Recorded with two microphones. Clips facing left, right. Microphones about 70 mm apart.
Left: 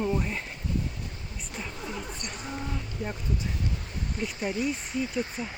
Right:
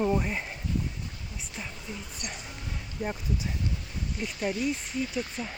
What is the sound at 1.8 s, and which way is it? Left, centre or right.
Speech, left.